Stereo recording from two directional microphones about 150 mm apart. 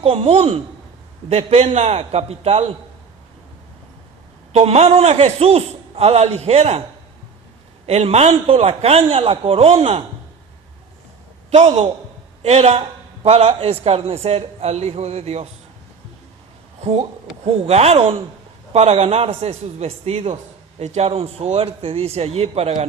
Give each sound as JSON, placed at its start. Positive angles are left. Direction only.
{"t": 0.0, "sound": "a man's voice", "side_deg": -40}
{"t": 4.5, "sound": "a man's voice", "side_deg": -45}
{"t": 7.9, "sound": "a man's voice", "side_deg": -45}
{"t": 11.5, "sound": "a man's voice", "side_deg": -50}
{"t": 17.4, "sound": "a man's voice", "side_deg": -45}